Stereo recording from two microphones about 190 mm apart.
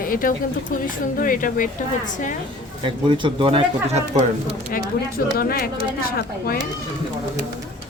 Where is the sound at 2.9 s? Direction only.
25° right (ahead or behind).